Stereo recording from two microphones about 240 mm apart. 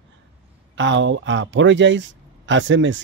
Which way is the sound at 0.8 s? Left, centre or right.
Right.